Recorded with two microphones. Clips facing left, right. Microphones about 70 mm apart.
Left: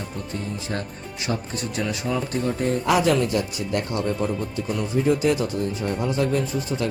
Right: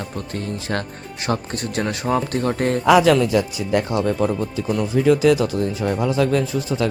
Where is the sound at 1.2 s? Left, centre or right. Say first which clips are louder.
Right 4 dB; right.